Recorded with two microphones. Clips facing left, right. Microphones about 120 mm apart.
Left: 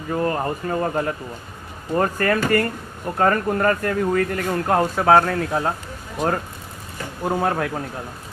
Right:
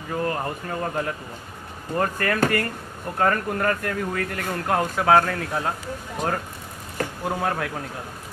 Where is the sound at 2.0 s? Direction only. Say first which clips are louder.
Left 3 dB; 35° left (ahead or behind).